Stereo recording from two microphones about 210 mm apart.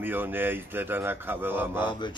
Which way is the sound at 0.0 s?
10° right (ahead or behind).